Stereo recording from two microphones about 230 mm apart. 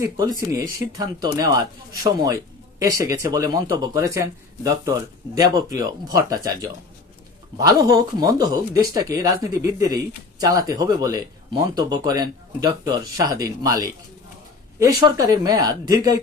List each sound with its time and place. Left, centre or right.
0.0 s speech: centre
14.9 s speech: centre